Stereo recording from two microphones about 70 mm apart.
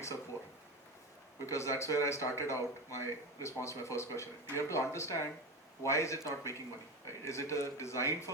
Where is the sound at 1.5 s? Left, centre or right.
Left.